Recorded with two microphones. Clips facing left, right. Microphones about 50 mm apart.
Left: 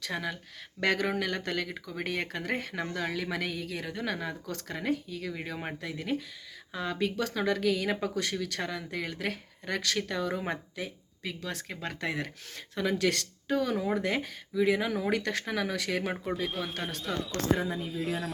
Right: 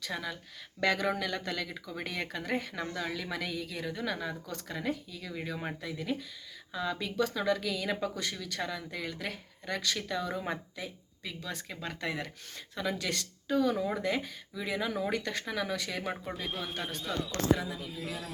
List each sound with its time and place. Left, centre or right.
0.0 s speech: left
5.8 s speech: left
15.1 s speech: left
15.4 s speech: left
16.5 s speech: centre